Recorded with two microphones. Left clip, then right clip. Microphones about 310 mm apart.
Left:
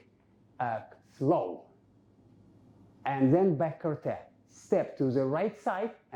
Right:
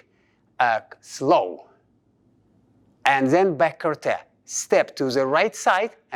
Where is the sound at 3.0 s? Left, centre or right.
Centre.